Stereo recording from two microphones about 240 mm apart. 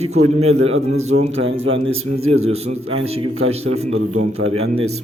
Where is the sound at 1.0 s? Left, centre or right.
Right.